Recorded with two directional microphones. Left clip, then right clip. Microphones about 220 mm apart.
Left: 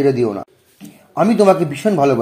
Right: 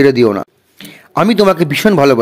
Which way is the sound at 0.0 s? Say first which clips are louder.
Right 6 dB; 35° right (ahead or behind).